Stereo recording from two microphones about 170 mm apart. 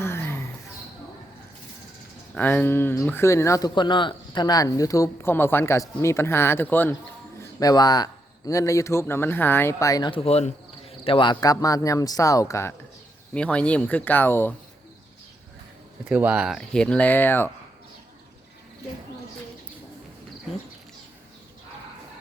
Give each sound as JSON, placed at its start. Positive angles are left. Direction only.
{"t": 0.0, "sound": "a sound", "side_deg": 15}
{"t": 2.3, "sound": "speech", "side_deg": 10}
{"t": 7.6, "sound": "speech", "side_deg": 25}
{"t": 13.3, "sound": "speech", "side_deg": 5}
{"t": 16.0, "sound": "speech", "side_deg": -5}